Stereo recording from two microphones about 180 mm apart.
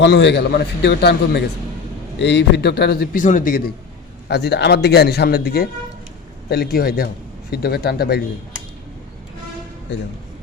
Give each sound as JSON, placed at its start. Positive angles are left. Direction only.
{"t": 0.0, "sound": "a man's voice", "side_deg": 75}
{"t": 4.3, "sound": "a man's voice", "side_deg": 70}
{"t": 9.9, "sound": "speech", "side_deg": 80}